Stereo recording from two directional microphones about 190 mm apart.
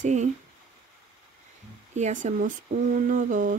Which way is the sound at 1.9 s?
40° right (ahead or behind).